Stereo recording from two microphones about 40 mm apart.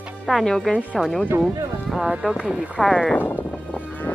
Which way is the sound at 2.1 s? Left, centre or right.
Centre.